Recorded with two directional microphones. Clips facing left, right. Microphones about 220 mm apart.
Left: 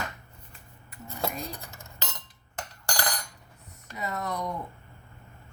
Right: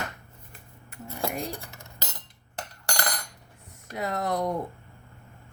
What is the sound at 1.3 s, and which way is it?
Cutlery, 75° right (ahead or behind).